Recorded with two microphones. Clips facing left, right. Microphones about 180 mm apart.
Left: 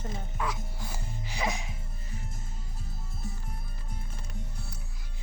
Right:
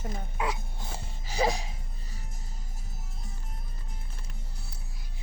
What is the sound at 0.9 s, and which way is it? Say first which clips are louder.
Music: right 2 dB; 30° right (ahead or behind).